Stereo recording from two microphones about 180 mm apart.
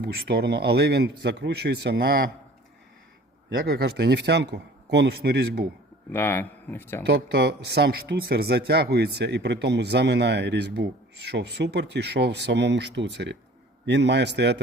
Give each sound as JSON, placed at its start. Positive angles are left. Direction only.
{"t": 0.0, "sound": "speech", "side_deg": -60}
{"t": 3.6, "sound": "speech", "side_deg": -60}
{"t": 6.1, "sound": "speech", "side_deg": 10}
{"t": 7.0, "sound": "speech", "side_deg": -65}